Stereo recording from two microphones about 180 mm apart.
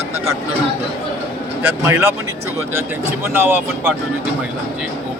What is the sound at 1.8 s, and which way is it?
Speech, 15° right (ahead or behind).